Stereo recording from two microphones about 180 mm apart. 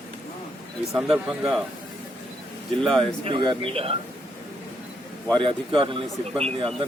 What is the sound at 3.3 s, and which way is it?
Speech, 30° right (ahead or behind).